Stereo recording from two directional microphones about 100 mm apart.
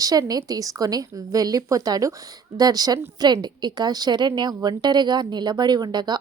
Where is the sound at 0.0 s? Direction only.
40° right (ahead or behind).